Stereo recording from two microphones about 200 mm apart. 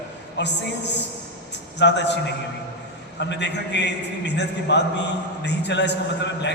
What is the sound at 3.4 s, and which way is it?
A man's voice, 60° left (ahead or behind).